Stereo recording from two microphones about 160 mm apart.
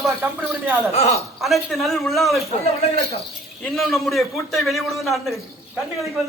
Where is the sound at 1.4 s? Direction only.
Centre (ahead or behind).